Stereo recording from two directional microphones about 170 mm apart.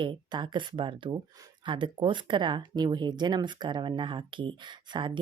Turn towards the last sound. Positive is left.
turn(degrees=-30)  # may be behind; listen again after turning